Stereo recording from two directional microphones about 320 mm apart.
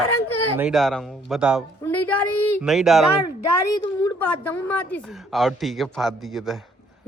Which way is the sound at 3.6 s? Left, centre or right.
Centre.